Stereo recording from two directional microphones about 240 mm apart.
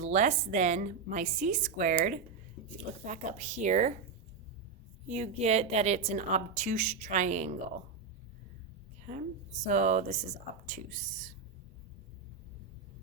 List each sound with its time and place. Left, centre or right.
0.0 s a woman's voice: right
5.0 s a woman's voice: right
9.6 s a woman's voice: right